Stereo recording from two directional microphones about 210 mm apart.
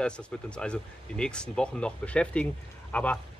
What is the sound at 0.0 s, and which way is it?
A man's voice, 5° left (ahead or behind).